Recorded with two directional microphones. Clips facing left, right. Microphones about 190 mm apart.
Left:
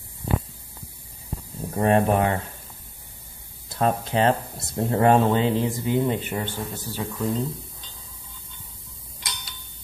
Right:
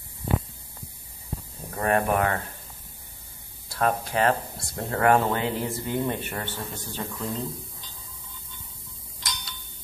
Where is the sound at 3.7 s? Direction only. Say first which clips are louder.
Left 2 dB; 20° left (ahead or behind).